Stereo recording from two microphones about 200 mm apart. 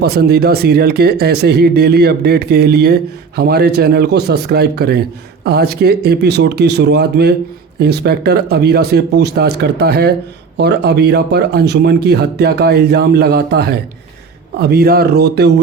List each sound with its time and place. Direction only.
0.0 s speech: 55° right (ahead or behind)